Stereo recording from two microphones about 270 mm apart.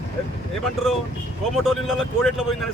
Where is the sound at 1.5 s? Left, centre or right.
Centre.